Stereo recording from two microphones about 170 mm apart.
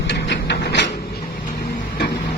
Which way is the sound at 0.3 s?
90° left.